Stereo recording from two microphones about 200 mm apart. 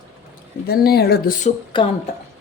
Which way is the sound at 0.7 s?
50° left (ahead or behind).